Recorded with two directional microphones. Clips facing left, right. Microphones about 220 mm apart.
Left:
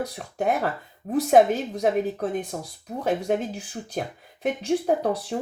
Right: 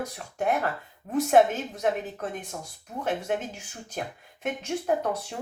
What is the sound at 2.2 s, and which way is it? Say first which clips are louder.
Speech: left 7 dB; 35° left (ahead or behind).